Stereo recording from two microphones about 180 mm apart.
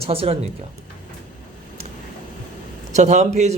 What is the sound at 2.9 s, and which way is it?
Speech, 40° right (ahead or behind).